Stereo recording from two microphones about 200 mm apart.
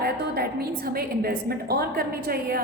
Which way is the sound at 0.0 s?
50° right (ahead or behind).